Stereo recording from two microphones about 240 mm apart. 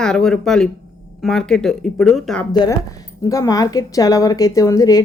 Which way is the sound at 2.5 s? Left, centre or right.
Centre.